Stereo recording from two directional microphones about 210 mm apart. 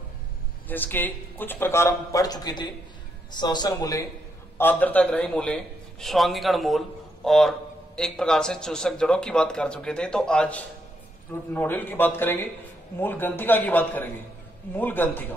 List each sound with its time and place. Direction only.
0.7 s a man's voice: 10° left (ahead or behind)